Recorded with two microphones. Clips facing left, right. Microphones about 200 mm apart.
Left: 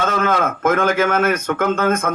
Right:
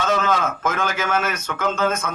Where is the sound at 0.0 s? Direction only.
55° left (ahead or behind).